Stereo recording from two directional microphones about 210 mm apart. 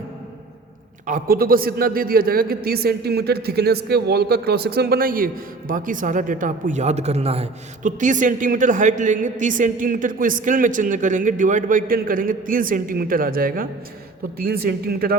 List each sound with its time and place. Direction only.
1.0 s a man's voice: 40° right (ahead or behind)